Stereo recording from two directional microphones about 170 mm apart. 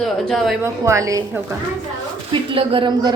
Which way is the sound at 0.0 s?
Centre (ahead or behind).